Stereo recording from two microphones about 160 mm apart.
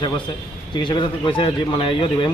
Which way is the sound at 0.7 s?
30° left (ahead or behind).